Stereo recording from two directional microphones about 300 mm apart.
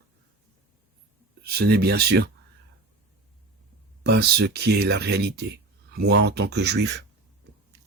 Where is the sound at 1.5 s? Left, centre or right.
Right.